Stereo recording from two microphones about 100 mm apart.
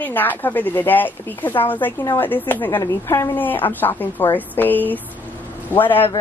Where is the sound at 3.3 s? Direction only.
20° left (ahead or behind).